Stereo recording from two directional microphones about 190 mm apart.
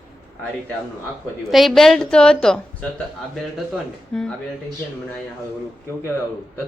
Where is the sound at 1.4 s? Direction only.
Centre (ahead or behind).